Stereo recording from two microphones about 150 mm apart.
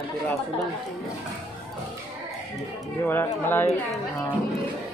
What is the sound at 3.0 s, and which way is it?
Speech, 15° left (ahead or behind).